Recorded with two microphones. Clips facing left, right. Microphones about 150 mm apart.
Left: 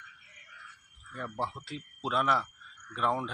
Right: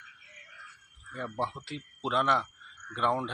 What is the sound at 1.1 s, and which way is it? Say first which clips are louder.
Speech: right 2 dB; centre (ahead or behind).